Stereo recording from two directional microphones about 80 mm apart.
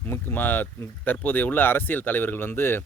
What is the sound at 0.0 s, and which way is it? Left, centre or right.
Speech, left.